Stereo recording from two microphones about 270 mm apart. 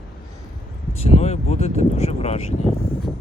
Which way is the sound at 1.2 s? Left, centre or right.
Left.